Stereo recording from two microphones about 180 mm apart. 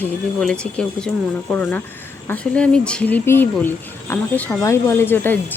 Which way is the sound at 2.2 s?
5° left (ahead or behind).